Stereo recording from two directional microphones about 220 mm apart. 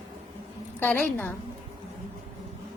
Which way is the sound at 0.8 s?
5° left (ahead or behind).